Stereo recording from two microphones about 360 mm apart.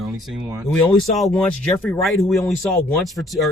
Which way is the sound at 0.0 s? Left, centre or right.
Centre.